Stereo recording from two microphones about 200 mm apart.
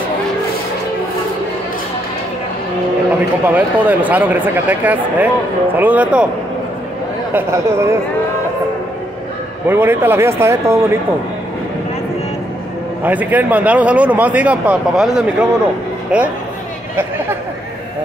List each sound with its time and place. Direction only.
3.4 s a man's voice: 10° right (ahead or behind)
7.3 s a man's voice: 15° right (ahead or behind)
9.7 s a man's voice: 10° right (ahead or behind)
13.0 s a man's voice: 10° right (ahead or behind)